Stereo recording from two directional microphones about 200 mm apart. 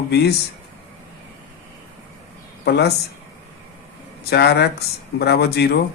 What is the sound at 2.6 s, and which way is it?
Speech, 55° left (ahead or behind).